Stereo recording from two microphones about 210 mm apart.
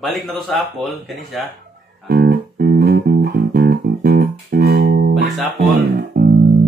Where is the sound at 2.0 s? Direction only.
50° right (ahead or behind).